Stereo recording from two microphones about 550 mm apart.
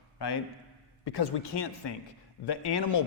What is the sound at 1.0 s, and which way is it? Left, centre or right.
A man's voice, left.